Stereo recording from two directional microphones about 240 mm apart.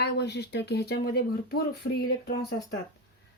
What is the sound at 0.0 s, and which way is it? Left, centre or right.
A woman's voice, left.